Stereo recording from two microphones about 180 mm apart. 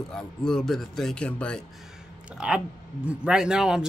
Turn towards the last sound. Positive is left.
turn(degrees=-5)  # may be behind; listen again after turning